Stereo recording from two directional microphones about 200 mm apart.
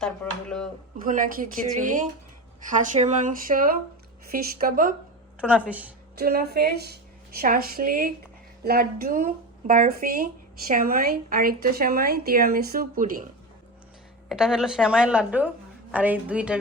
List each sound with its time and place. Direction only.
0.0 s a woman's voice: 5° left (ahead or behind)
1.0 s a woman's voice: 40° right (ahead or behind)
5.4 s a woman's voice: 5° right (ahead or behind)
6.1 s a woman's voice: 50° right (ahead or behind)
14.3 s a woman's voice: 5° right (ahead or behind)